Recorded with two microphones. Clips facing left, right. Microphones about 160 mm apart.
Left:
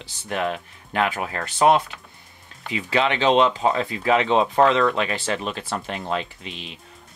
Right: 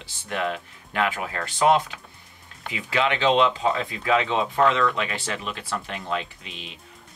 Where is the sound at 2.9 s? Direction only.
30° left (ahead or behind).